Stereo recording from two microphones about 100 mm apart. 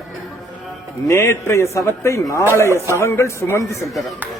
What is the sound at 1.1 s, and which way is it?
Speech, 25° left (ahead or behind).